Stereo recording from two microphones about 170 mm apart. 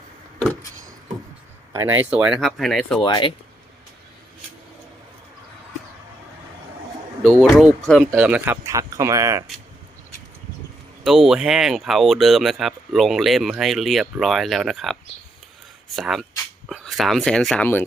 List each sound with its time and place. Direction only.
1.7 s speech: 15° right (ahead or behind); by 3.0 s centre (ahead or behind)
3.0 s speech: 30° left (ahead or behind)
7.4 s speech: centre (ahead or behind); by 9.4 s 15° right (ahead or behind)
11.0 s speech: centre (ahead or behind)
16.0 s speech: centre (ahead or behind)